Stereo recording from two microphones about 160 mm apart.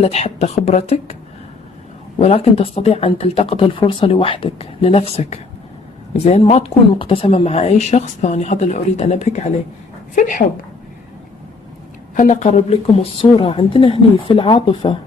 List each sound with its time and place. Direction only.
0.0 s speech: 45° left (ahead or behind)
2.1 s speech: 40° left (ahead or behind)
12.2 s speech: 50° left (ahead or behind); by 15.0 s 30° left (ahead or behind)